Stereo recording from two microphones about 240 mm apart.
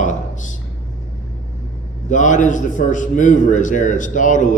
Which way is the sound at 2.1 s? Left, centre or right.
Left.